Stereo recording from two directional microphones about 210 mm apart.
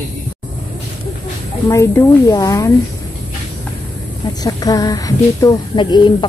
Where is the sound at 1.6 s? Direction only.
15° left (ahead or behind).